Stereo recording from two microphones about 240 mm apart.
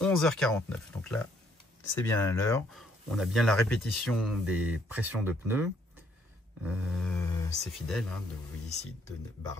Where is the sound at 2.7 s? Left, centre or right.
Centre.